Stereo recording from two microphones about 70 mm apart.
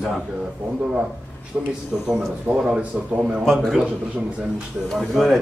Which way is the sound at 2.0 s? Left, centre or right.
Centre.